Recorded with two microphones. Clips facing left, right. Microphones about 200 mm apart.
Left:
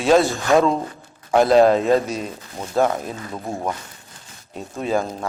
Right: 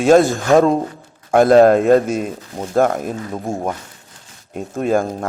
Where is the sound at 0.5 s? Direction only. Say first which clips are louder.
Right 4 dB; 55° right (ahead or behind).